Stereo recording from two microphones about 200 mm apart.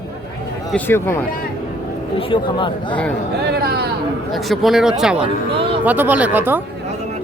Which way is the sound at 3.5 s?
50° right (ahead or behind).